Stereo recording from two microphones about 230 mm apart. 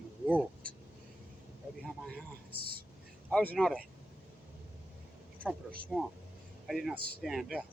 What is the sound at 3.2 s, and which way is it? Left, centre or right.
Speech, centre.